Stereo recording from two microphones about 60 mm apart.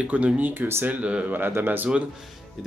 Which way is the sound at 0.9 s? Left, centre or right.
Right.